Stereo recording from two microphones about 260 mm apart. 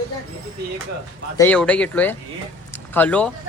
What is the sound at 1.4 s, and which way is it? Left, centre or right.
A man's voice, centre.